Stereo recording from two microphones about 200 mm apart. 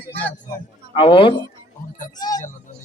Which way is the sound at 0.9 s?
25° left (ahead or behind).